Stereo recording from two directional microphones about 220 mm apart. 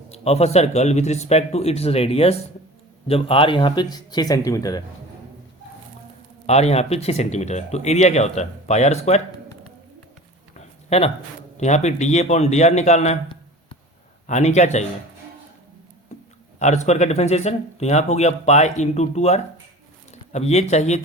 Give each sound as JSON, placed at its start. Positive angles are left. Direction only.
{"t": 0.1, "sound": "speech", "side_deg": 30}
{"t": 6.4, "sound": "speech", "side_deg": 30}
{"t": 10.8, "sound": "a man's voice", "side_deg": 30}
{"t": 16.6, "sound": "speech", "side_deg": 30}